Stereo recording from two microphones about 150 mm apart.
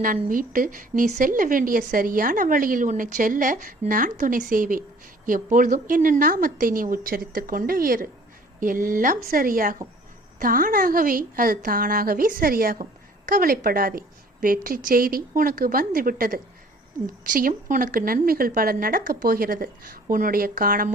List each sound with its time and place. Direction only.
0.0 s a woman's voice: 65° right (ahead or behind)
12.8 s speech: 65° right (ahead or behind)